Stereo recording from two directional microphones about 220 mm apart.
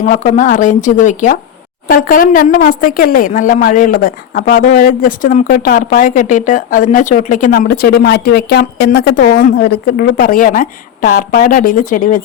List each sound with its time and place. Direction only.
0.0 s a woman's voice: 35° left (ahead or behind)